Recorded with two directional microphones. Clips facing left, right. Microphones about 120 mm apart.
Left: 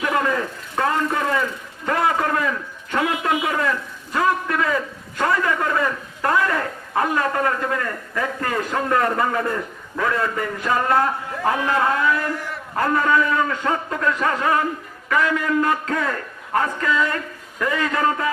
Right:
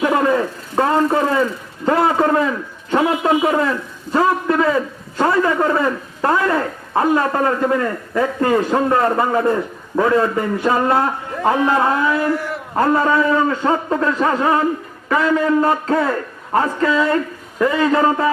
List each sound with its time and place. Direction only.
0.0 s a man's voice: 25° right (ahead or behind)